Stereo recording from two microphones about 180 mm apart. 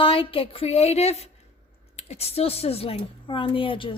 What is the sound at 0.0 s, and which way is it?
Speech, 30° left (ahead or behind).